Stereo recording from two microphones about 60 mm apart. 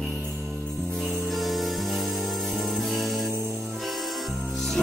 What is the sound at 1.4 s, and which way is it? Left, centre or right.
Music, centre.